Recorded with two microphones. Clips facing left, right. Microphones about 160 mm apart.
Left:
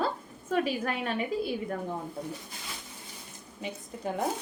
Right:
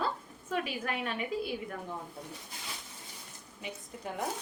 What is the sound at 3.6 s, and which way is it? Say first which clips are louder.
Speech: left 4 dB; 35° left (ahead or behind).